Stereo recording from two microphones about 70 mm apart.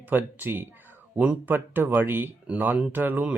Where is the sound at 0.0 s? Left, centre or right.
Right.